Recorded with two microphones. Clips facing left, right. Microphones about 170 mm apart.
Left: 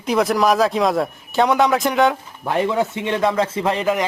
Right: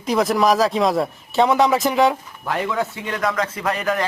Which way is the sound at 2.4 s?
20° left (ahead or behind).